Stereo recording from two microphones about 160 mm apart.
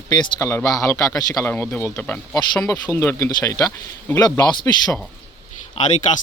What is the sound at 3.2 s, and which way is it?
Speech, 20° left (ahead or behind).